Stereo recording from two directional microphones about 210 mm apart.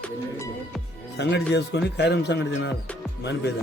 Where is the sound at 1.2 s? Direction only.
55° left (ahead or behind).